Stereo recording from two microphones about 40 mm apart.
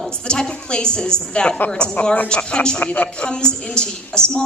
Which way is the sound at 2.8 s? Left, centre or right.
Left.